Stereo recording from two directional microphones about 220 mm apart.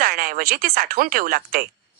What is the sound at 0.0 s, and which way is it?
A woman's voice, 40° right (ahead or behind).